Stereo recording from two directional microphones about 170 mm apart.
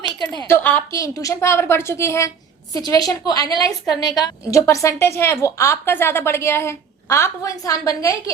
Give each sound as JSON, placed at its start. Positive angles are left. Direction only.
{"t": 0.4, "sound": "a woman's voice", "side_deg": 10}